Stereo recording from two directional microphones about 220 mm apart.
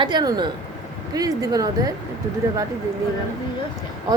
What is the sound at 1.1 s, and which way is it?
Music, 15° right (ahead or behind).